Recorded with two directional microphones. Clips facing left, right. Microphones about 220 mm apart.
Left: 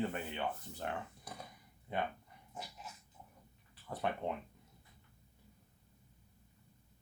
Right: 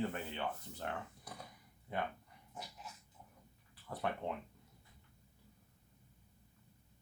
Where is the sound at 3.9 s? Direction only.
20° left (ahead or behind).